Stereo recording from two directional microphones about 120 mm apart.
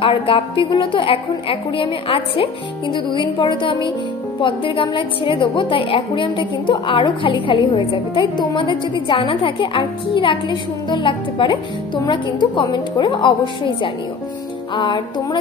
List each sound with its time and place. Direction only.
0.0 s a woman's voice: 50° left (ahead or behind)